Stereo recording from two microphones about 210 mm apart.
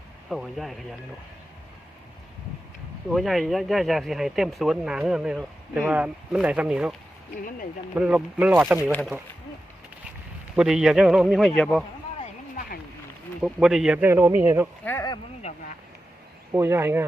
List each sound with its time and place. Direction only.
0.3 s speech: centre (ahead or behind)
3.1 s speech: centre (ahead or behind)
7.9 s speech: 5° right (ahead or behind)
8.9 s speech: 5° left (ahead or behind)
10.5 s speech: 5° right (ahead or behind)
12.5 s a sound: 45° left (ahead or behind)
13.4 s speech: centre (ahead or behind)
14.8 s speech: 15° left (ahead or behind)
15.4 s speech: 30° left (ahead or behind)
16.5 s speech: 10° right (ahead or behind)